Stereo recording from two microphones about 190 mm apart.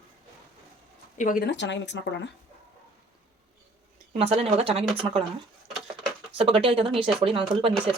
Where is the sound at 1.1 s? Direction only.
45° left (ahead or behind).